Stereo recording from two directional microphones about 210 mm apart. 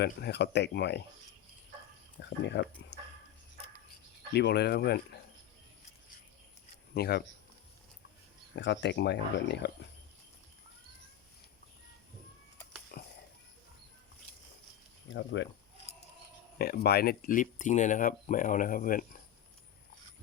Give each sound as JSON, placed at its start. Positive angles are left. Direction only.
{"t": 0.0, "sound": "speech", "side_deg": 50}
{"t": 2.4, "sound": "speech", "side_deg": 55}
{"t": 2.9, "sound": "dog", "side_deg": 55}
{"t": 4.4, "sound": "speech", "side_deg": 50}
{"t": 6.9, "sound": "speech", "side_deg": 50}
{"t": 8.5, "sound": "speech", "side_deg": 60}
{"t": 12.9, "sound": "a sound", "side_deg": 45}
{"t": 15.1, "sound": "speech", "side_deg": 60}
{"t": 16.6, "sound": "speech", "side_deg": 50}